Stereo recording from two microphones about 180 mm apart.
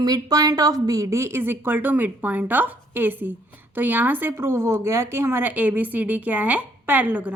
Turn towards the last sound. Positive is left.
turn(degrees=-10)  # may be behind; listen again after turning